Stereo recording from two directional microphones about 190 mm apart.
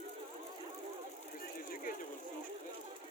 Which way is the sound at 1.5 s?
45° left (ahead or behind).